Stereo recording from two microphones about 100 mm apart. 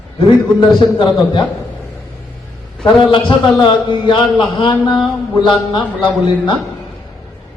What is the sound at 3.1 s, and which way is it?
A man's voice, 55° left (ahead or behind).